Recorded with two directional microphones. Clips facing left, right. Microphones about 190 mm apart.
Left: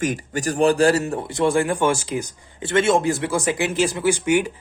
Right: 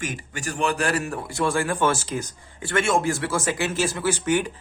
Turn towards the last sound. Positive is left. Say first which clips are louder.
# left 4 dB
turn(degrees=15)  # may be behind; listen again after turning